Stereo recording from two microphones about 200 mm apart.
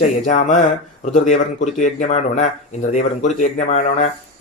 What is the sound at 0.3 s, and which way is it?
Speech, 40° left (ahead or behind).